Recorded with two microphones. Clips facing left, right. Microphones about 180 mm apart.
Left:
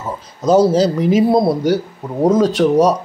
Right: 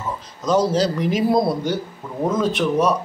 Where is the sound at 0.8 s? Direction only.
30° left (ahead or behind).